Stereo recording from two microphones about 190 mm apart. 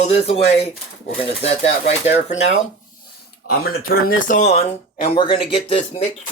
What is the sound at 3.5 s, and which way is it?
Speech, 50° left (ahead or behind).